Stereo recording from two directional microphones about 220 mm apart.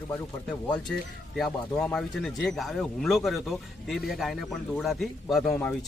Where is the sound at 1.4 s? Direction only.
5° left (ahead or behind).